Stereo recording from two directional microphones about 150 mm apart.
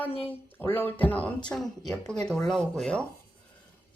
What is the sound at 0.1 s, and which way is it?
Speech, 40° left (ahead or behind).